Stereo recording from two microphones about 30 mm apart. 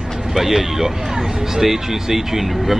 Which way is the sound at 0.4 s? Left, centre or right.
Centre.